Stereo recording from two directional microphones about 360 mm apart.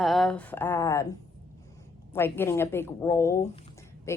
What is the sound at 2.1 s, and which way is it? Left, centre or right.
A woman's voice, centre.